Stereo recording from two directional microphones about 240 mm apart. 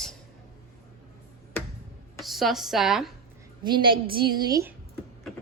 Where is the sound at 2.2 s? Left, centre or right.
Centre.